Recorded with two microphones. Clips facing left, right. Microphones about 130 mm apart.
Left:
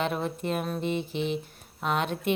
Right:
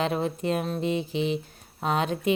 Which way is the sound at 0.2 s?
25° right (ahead or behind).